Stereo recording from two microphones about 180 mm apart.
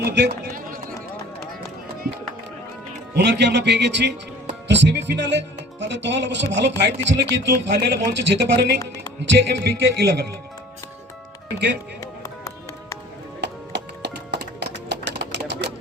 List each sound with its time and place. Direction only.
0.0 s a sound: 60° right (ahead or behind)
3.2 s speech: 70° right (ahead or behind)
4.7 s music: 80° right
5.8 s speech: 80° right
13.4 s music: 70° right (ahead or behind)